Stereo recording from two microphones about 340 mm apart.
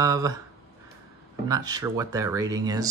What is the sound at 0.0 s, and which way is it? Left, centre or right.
Speech, centre.